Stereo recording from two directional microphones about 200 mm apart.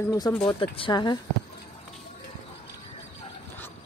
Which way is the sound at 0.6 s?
25° left (ahead or behind).